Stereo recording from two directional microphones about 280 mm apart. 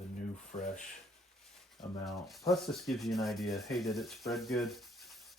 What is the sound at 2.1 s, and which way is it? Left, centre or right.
Speech, centre.